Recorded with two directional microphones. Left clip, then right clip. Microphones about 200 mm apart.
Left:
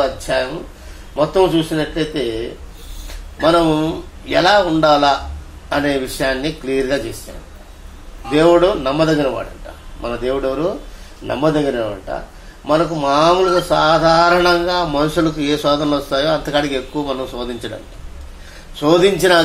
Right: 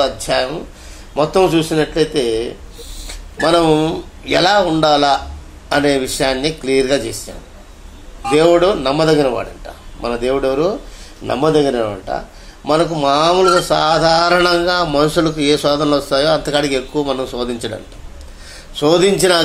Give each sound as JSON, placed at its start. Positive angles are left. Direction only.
{"t": 1.1, "sound": "a man's voice", "side_deg": -30}
{"t": 3.4, "sound": "a man's voice", "side_deg": -25}
{"t": 8.3, "sound": "a man's voice", "side_deg": -25}
{"t": 12.6, "sound": "a man's voice", "side_deg": -25}
{"t": 18.8, "sound": "a man's voice", "side_deg": -20}